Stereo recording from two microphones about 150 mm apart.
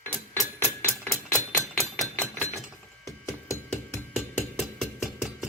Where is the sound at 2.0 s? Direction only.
5° left (ahead or behind).